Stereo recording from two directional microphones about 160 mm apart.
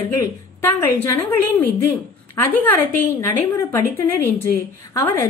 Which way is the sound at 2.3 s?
15° left (ahead or behind).